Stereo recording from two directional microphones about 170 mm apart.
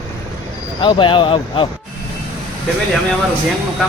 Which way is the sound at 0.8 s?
30° left (ahead or behind).